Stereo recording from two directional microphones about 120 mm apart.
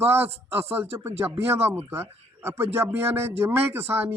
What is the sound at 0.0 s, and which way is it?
Speech, 20° right (ahead or behind).